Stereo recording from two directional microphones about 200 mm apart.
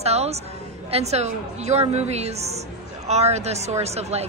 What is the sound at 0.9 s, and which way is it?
A woman's voice, 35° right (ahead or behind).